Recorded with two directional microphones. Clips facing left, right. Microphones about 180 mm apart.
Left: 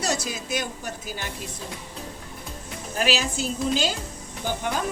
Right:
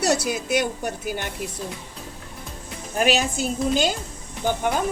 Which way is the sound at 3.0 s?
55° right (ahead or behind).